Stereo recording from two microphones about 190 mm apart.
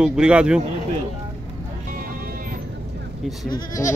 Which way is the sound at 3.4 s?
20° left (ahead or behind).